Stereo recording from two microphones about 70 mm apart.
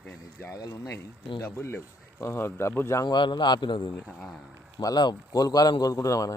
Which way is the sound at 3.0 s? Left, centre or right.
Left.